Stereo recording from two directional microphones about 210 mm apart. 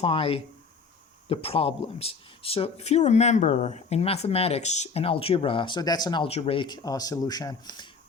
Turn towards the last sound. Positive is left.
turn(degrees=20)  # may be behind; listen again after turning